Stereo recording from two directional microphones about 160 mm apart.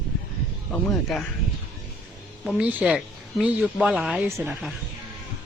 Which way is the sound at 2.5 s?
5° right (ahead or behind).